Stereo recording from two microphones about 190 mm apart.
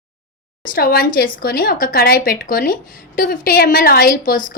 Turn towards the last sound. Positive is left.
turn(degrees=45)  # may be behind; listen again after turning